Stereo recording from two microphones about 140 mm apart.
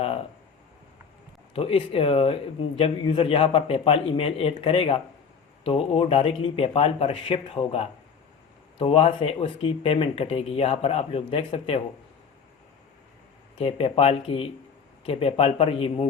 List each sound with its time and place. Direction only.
0.0 s a sound: 45° left (ahead or behind)
1.5 s speech: 40° left (ahead or behind)
13.6 s speech: 40° left (ahead or behind)